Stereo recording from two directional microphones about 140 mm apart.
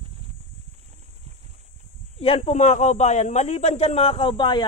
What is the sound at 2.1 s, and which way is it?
A man's voice, 45° left (ahead or behind).